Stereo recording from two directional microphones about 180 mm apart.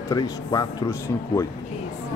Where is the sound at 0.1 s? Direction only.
20° left (ahead or behind).